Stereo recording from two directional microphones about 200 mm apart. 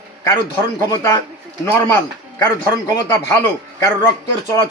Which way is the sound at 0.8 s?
15° left (ahead or behind).